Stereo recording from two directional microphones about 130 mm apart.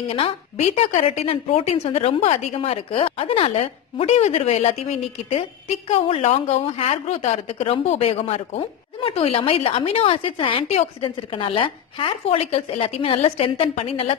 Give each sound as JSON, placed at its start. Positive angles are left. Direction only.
{"t": 0.1, "sound": "a woman's voice", "side_deg": 50}